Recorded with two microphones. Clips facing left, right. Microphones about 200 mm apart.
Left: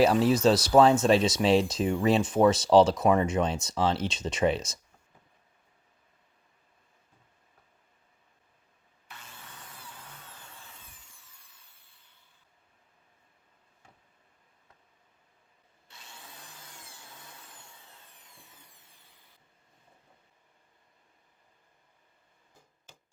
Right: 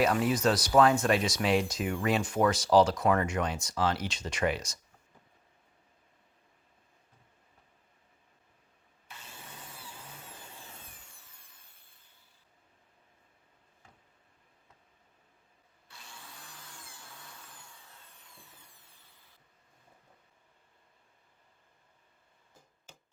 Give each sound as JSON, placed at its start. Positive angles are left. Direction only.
{"t": 0.0, "sound": "speech", "side_deg": 30}